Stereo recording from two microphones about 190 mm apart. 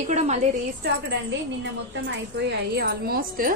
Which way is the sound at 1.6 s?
65° right (ahead or behind).